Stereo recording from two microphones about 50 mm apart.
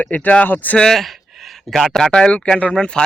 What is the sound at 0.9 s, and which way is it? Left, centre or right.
Speech, centre.